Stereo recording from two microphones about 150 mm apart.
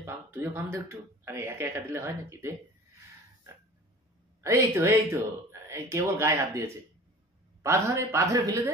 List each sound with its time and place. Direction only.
0.0 s speech: 15° right (ahead or behind)
4.4 s speech: 20° right (ahead or behind)